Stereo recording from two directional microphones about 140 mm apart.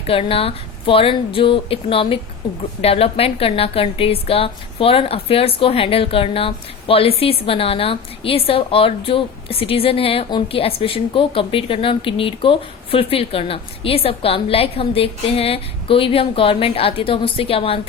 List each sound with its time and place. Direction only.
0.1 s a woman's voice: 40° left (ahead or behind)